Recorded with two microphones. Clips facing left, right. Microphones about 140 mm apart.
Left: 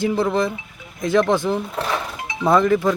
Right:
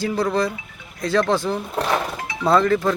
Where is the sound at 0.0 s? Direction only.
20° left (ahead or behind).